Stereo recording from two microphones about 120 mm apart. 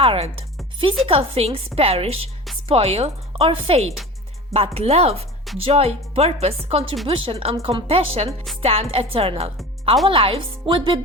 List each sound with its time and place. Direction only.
0.0 s a woman's voice: 50° right (ahead or behind)